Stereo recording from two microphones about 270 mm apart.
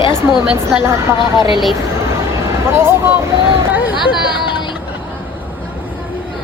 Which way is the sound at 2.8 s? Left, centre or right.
Centre.